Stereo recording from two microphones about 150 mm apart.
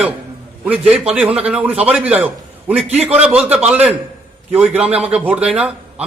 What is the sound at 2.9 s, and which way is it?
Speech, 45° right (ahead or behind).